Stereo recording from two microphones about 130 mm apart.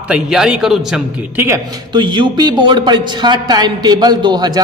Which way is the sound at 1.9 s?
35° right (ahead or behind).